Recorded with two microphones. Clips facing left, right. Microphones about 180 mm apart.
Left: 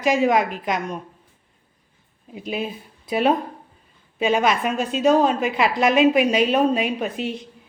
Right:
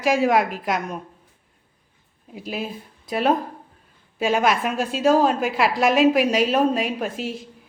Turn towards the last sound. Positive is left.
turn(degrees=0)  # may be behind; listen again after turning